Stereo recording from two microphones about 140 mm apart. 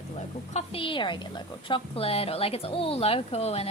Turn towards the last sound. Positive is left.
turn(degrees=45)  # may be behind; listen again after turning